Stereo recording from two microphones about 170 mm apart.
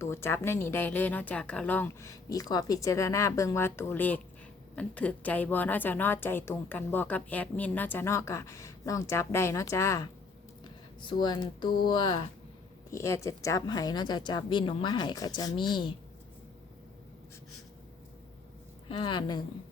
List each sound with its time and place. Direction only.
0.0 s a woman's voice: 15° left (ahead or behind)
18.9 s a woman's voice: 30° left (ahead or behind)